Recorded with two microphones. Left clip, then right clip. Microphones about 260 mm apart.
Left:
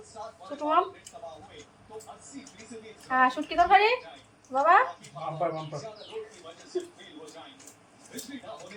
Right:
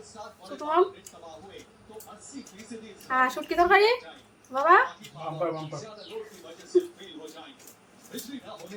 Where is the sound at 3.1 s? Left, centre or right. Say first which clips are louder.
Left 1 dB; centre.